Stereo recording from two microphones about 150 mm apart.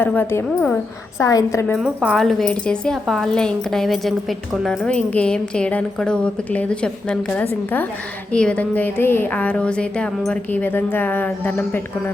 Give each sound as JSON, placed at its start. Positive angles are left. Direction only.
{"t": 0.0, "sound": "a woman's voice", "side_deg": 15}
{"t": 1.7, "sound": "speech", "side_deg": 5}